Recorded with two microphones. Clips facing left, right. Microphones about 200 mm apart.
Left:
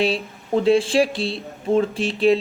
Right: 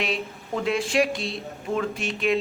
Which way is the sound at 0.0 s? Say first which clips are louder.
Left 7 dB; 30° left (ahead or behind).